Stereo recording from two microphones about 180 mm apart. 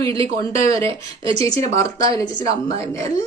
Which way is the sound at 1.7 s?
20° left (ahead or behind).